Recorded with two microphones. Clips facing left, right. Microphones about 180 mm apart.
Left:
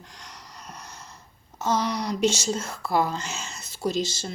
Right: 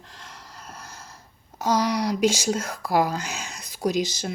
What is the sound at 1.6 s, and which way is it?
Speech, 10° right (ahead or behind).